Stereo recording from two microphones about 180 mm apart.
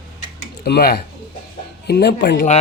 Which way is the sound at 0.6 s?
60° left (ahead or behind).